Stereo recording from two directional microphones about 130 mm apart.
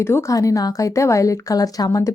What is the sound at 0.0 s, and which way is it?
Speech, 20° left (ahead or behind).